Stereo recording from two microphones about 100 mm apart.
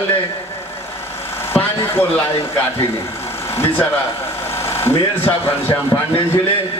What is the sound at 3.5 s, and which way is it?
Speech, 25° left (ahead or behind).